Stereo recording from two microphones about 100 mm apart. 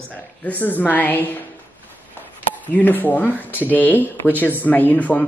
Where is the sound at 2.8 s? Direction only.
20° left (ahead or behind).